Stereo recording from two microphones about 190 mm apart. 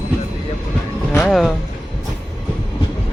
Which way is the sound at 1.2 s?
5° left (ahead or behind).